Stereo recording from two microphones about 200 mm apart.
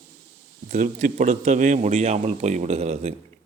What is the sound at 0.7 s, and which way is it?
Speech, 35° right (ahead or behind).